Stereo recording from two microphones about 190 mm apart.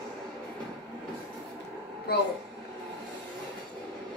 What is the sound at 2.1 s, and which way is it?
Speech, 55° left (ahead or behind).